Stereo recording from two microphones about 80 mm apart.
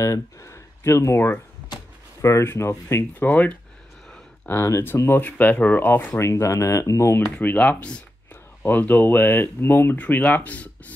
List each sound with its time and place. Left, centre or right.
0.0 s speech: left
3.2 s speech: centre
4.5 s speech: left
5.2 s speech: centre
6.1 s speech: left
7.2 s speech: left